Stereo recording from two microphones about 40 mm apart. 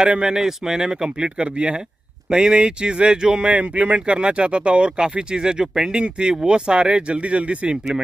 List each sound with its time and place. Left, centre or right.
0.0 s speech: right
3.4 s speech: right
7.7 s speech: centre